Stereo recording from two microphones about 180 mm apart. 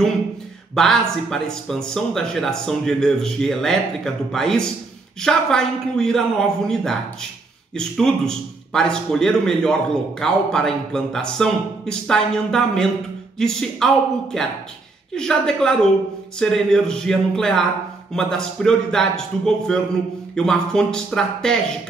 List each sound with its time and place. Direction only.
0.7 s a man's voice: 5° left (ahead or behind)